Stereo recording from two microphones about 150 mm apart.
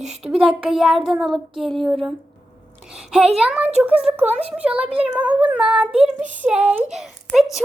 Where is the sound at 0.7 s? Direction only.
Centre (ahead or behind).